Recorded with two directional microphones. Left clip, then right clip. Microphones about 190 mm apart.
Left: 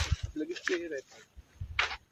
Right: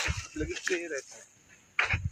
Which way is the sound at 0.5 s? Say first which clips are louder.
Right 1 dB; 60° right (ahead or behind).